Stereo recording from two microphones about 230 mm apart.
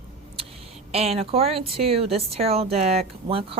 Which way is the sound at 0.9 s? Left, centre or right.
Right.